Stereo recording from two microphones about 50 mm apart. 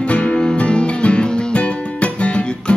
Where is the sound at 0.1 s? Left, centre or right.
Left.